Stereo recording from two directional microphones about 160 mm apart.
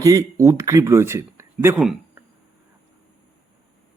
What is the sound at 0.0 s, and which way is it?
Speech, 20° right (ahead or behind).